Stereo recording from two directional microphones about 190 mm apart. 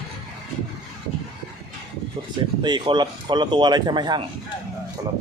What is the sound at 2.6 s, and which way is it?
A man's voice, 25° right (ahead or behind).